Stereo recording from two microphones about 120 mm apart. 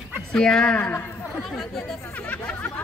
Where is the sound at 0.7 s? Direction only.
20° left (ahead or behind).